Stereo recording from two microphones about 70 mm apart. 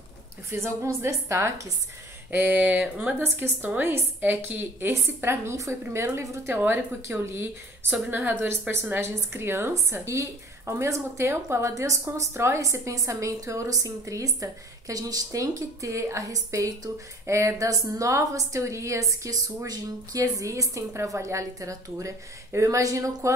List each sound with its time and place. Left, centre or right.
0.5 s a woman's voice: right
2.3 s a woman's voice: right